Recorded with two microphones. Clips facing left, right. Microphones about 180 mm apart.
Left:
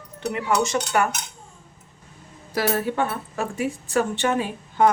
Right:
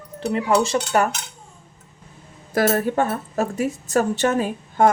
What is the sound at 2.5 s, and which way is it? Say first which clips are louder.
A woman's voice: right 4 dB; 50° right (ahead or behind).